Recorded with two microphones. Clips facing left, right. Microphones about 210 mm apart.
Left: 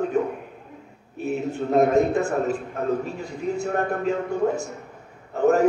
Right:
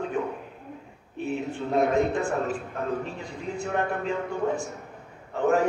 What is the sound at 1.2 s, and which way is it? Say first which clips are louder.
A man's voice: left 4 dB; 40° left (ahead or behind).